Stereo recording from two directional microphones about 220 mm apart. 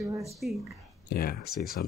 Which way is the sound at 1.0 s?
45° left (ahead or behind).